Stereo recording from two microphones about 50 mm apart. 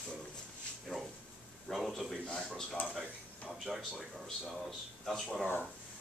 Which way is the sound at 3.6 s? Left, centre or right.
Centre.